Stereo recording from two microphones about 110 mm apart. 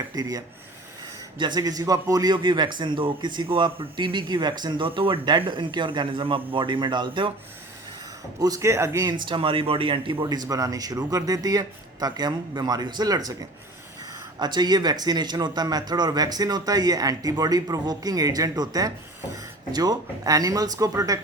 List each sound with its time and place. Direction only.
0.1 s a man's voice: 35° right (ahead or behind)
2.3 s a man's voice: 45° right (ahead or behind)
8.4 s a man's voice: 30° right (ahead or behind)
9.0 s a man's voice: 45° right (ahead or behind)
10.2 s a man's voice: 35° right (ahead or behind)